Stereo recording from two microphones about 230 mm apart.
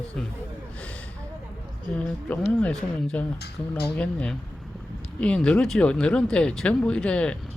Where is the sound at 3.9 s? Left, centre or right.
Centre.